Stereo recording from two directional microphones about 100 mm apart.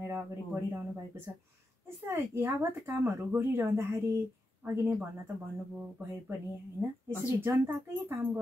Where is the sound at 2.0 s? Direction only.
25° right (ahead or behind).